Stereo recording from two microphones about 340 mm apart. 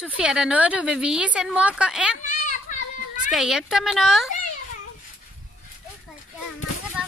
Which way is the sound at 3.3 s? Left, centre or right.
Centre.